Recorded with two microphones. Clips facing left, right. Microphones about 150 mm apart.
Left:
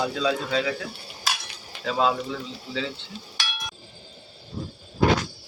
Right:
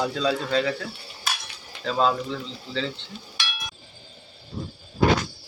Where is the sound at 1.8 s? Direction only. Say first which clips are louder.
Right 1 dB; 5° left (ahead or behind).